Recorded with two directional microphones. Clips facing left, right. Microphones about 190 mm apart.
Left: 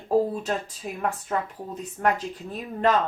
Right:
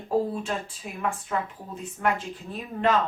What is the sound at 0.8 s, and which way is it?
A woman's voice, 45° left (ahead or behind).